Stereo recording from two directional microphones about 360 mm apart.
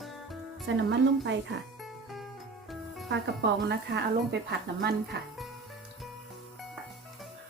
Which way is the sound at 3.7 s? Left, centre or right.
Right.